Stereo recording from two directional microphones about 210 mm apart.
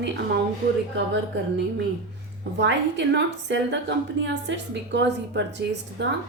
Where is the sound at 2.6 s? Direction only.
55° right (ahead or behind).